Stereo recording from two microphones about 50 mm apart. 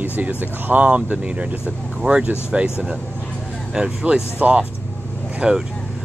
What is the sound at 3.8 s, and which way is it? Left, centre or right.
Speech, right.